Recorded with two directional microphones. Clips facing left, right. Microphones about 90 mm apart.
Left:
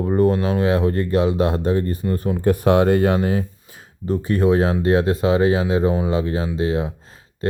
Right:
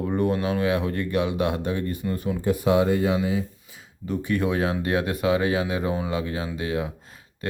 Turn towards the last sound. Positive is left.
turn(degrees=30)  # may be behind; listen again after turning